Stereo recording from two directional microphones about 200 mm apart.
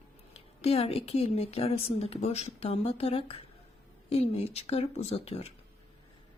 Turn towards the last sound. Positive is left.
turn(degrees=30)  # may be behind; listen again after turning